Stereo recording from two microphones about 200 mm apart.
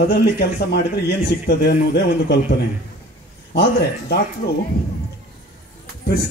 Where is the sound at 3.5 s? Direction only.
55° left (ahead or behind).